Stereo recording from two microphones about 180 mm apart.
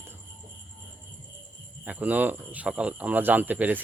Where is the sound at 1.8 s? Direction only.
10° right (ahead or behind).